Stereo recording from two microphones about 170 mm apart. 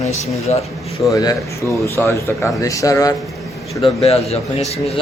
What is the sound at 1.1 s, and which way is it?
Speech, 20° left (ahead or behind).